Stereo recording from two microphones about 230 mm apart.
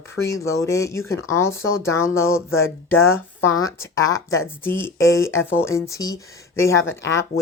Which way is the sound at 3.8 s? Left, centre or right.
Centre.